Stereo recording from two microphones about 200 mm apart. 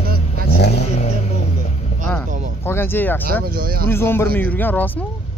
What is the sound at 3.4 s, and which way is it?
Speech, 50° right (ahead or behind).